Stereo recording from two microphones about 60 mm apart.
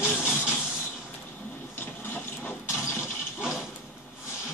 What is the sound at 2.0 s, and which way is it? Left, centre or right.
Printer, left.